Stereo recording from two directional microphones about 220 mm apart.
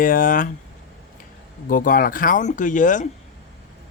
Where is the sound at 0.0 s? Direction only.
40° left (ahead or behind).